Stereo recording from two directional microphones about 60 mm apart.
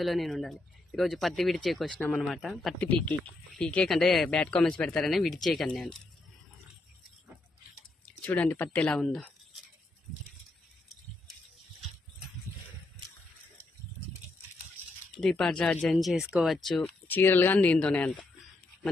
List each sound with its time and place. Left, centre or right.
0.0 s speech: centre
1.9 s speech: centre
2.1 s speech: centre
2.8 s speech: left
3.2 s speech: centre
4.3 s speech: centre
8.4 s speech: left
8.8 s speech: centre
15.1 s speech: centre
16.0 s speech: centre
17.1 s speech: left